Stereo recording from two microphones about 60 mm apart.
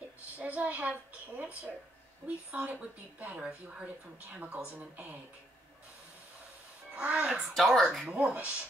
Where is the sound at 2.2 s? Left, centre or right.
Right.